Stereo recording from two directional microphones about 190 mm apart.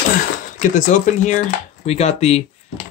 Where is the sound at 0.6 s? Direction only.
40° left (ahead or behind).